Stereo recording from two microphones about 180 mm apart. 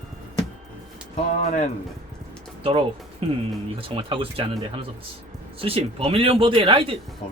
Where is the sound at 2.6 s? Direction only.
30° right (ahead or behind).